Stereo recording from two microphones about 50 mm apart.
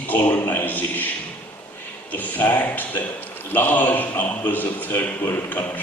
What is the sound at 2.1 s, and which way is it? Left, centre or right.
A man's voice, left.